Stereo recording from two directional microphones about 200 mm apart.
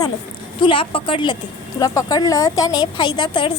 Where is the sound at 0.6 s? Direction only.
25° left (ahead or behind).